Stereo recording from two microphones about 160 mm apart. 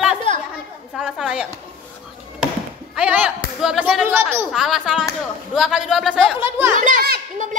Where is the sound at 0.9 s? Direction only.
5° right (ahead or behind).